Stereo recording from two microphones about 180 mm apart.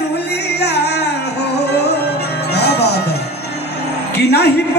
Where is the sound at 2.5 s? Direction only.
65° left (ahead or behind).